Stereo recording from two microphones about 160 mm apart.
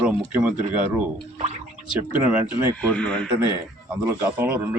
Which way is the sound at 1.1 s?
40° right (ahead or behind).